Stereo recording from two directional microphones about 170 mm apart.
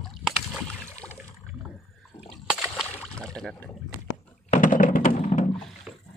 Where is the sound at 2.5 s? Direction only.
Centre (ahead or behind).